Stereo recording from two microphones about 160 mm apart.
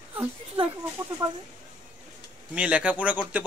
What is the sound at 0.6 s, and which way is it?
Speech, 35° right (ahead or behind).